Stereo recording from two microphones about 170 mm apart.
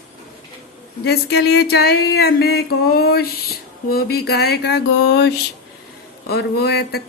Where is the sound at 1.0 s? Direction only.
75° left (ahead or behind).